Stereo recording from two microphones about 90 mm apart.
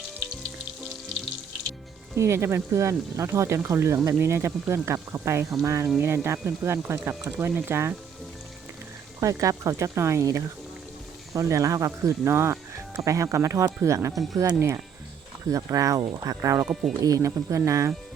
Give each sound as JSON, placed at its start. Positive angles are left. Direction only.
{"t": 2.1, "sound": "speech", "side_deg": -30}
{"t": 9.2, "sound": "speech", "side_deg": -35}
{"t": 15.4, "sound": "speech", "side_deg": -40}